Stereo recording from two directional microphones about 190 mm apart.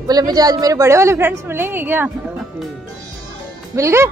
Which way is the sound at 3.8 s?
15° right (ahead or behind).